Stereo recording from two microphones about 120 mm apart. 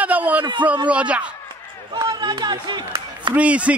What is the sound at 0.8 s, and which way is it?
Speech, 10° right (ahead or behind).